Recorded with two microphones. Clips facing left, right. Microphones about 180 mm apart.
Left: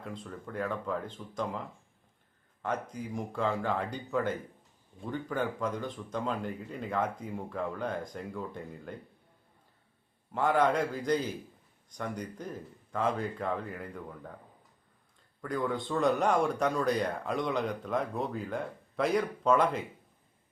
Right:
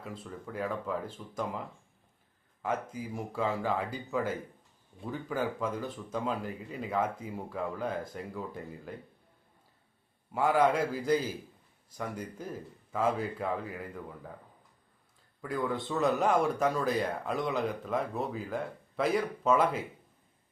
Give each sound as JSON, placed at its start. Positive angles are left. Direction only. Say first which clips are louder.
{"t": 0.0, "sound": "a man's voice", "louder": "left 1 dB", "side_deg": -5}
{"t": 10.3, "sound": "a man's voice", "louder": "right 1 dB", "side_deg": -10}
{"t": 15.4, "sound": "a man's voice", "louder": "even", "side_deg": -5}